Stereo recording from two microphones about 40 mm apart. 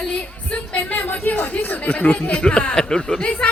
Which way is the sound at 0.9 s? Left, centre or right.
Left.